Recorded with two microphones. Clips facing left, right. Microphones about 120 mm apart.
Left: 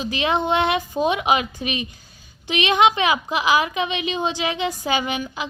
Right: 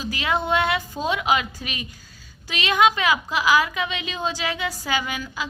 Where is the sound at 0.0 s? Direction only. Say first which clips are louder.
Left 3 dB; 20° left (ahead or behind).